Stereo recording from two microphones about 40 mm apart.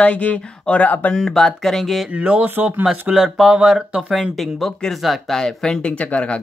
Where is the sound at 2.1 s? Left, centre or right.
Right.